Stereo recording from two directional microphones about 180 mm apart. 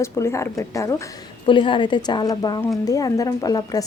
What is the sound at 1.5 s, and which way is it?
Speech, 25° left (ahead or behind).